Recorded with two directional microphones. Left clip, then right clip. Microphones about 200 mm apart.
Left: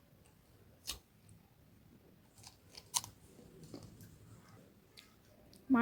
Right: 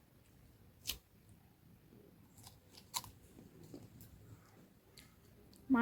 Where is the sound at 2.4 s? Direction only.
15° left (ahead or behind).